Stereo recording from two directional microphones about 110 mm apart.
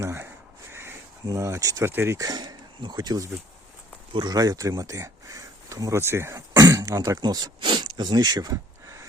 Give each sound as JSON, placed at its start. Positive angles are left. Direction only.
{"t": 0.0, "sound": "speech", "side_deg": -25}
{"t": 0.7, "sound": "a sound", "side_deg": -20}
{"t": 1.3, "sound": "speech", "side_deg": -30}